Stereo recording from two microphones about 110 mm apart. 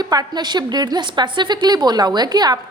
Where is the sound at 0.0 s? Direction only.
35° right (ahead or behind).